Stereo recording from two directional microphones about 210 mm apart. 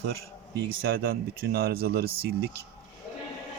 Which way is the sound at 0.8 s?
45° right (ahead or behind).